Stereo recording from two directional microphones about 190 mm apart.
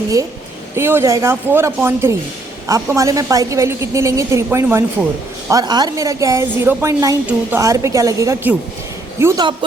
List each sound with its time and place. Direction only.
0.8 s a woman's voice: 10° right (ahead or behind)